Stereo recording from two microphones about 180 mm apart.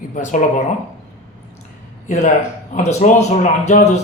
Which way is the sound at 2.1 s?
40° left (ahead or behind).